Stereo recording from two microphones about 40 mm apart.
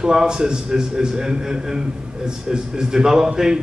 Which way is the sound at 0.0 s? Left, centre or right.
Centre.